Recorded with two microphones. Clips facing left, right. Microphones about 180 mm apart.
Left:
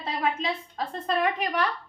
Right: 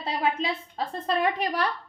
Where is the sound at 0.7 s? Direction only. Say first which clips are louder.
Right 1 dB; 35° right (ahead or behind).